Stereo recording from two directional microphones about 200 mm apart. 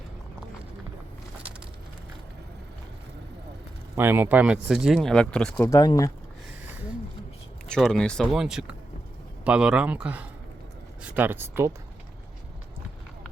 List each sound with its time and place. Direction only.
3.9 s speech: 10° right (ahead or behind)
5.6 s speech: 20° left (ahead or behind)
7.7 s speech: centre (ahead or behind)